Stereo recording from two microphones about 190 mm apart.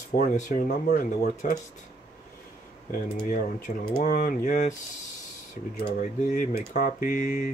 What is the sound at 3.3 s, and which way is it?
Speech, 45° left (ahead or behind).